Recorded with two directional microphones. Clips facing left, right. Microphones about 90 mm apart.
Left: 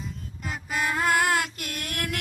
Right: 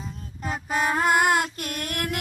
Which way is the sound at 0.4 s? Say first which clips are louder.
Right 4 dB; 35° right (ahead or behind).